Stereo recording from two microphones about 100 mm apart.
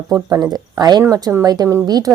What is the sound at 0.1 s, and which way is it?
A woman's voice, 40° right (ahead or behind).